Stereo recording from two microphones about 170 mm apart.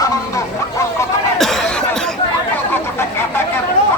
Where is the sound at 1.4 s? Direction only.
5° left (ahead or behind).